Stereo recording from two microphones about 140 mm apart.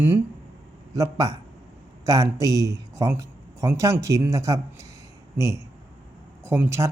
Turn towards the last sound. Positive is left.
turn(degrees=-20)  # may be behind; listen again after turning